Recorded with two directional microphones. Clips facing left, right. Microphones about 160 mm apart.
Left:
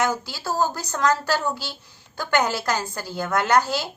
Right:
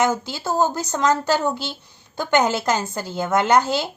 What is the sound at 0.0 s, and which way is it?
A woman's voice, 20° right (ahead or behind).